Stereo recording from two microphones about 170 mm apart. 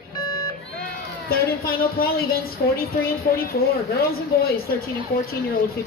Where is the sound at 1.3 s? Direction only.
65° left (ahead or behind).